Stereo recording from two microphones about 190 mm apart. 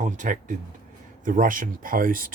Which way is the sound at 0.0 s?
40° right (ahead or behind).